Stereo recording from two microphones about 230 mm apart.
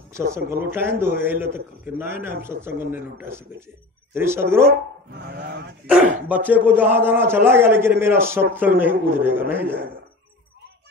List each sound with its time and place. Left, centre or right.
0.1 s a man's voice: centre
5.1 s speech: right
6.2 s a man's voice: centre